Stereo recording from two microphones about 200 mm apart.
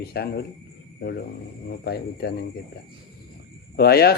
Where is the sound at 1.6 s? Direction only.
50° left (ahead or behind).